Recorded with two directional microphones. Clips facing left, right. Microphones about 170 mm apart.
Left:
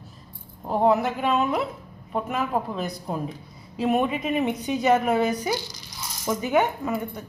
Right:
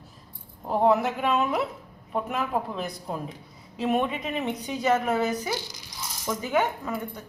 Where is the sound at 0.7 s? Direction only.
Centre (ahead or behind).